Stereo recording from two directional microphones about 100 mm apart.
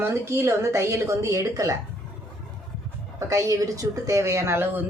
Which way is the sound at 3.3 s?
35° right (ahead or behind).